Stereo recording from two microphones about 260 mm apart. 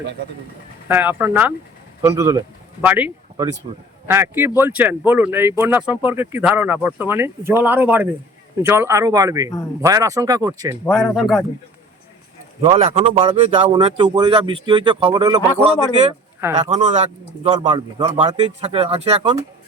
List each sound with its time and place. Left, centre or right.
0.9 s speech: centre
10.9 s speech: centre
12.7 s speech: right